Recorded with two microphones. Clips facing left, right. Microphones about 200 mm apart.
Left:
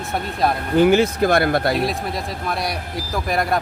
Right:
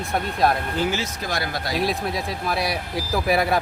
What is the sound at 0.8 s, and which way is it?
Speech, 55° left (ahead or behind).